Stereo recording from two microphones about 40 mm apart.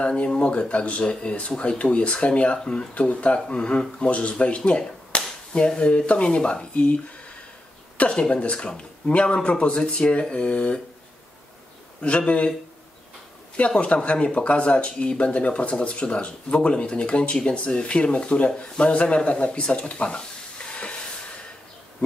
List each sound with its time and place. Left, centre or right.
0.2 s speech: left
3.3 s speech: left
8.1 s speech: left
12.0 s speech: left
13.6 s speech: left
20.6 s hiss: left